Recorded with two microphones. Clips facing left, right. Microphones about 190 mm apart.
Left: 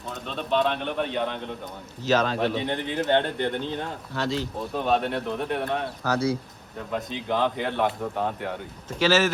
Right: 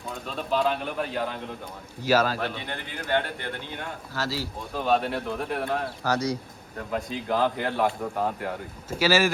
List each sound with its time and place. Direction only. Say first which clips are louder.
0.1 s speech: left 2 dB; 5° right (ahead or behind)
2.6 s speech: left 7 dB; 25° left (ahead or behind)
4.1 s speech: left 3 dB; 5° right (ahead or behind)